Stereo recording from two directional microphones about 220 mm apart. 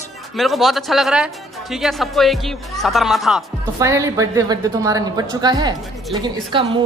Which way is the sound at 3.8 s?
15° right (ahead or behind).